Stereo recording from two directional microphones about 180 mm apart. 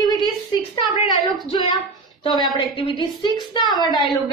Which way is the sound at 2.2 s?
25° left (ahead or behind).